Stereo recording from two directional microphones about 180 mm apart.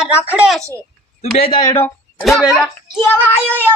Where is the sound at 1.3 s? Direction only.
30° left (ahead or behind).